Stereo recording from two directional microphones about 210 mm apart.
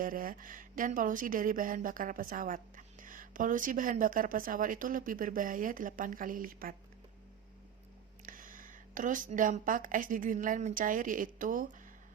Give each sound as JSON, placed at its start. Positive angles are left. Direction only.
{"t": 0.0, "sound": "speech", "side_deg": -40}
{"t": 8.3, "sound": "a woman's voice", "side_deg": -40}